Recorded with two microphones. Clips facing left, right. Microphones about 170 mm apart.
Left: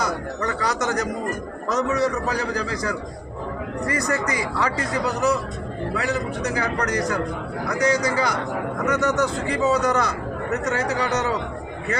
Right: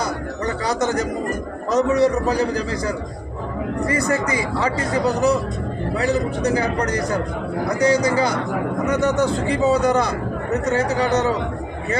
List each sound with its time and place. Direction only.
0.0 s a man's voice: 30° right (ahead or behind)